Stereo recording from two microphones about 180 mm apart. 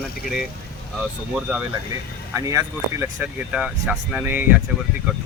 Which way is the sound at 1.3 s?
5° right (ahead or behind).